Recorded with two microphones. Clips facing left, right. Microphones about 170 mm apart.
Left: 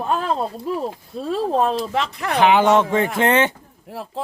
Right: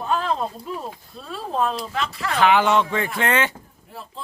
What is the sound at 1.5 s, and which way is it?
Speech, 40° left (ahead or behind).